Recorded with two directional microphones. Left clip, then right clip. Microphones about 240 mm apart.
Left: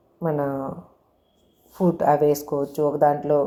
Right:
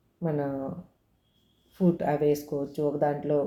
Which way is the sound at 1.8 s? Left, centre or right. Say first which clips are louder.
Left 7 dB; left.